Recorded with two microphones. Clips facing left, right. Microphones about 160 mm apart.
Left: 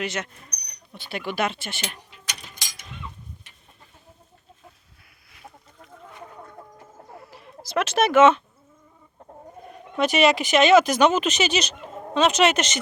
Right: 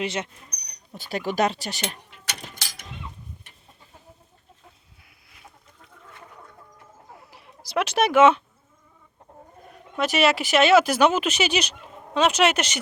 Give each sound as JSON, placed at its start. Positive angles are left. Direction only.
{"t": 0.0, "sound": "speech", "side_deg": -30}
{"t": 0.7, "sound": "speech", "side_deg": -40}
{"t": 2.0, "sound": "a sound", "side_deg": -55}
{"t": 7.3, "sound": "chicken", "side_deg": -15}
{"t": 10.0, "sound": "speech", "side_deg": -5}